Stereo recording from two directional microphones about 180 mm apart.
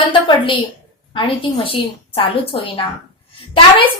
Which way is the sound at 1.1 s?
30° left (ahead or behind).